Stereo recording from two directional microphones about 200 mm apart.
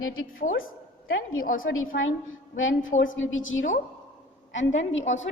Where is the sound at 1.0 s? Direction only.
90° left.